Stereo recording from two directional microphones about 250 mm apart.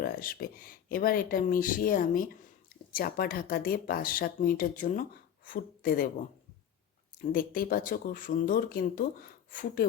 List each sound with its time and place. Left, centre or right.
0.0 s a woman's voice: left
7.2 s speech: left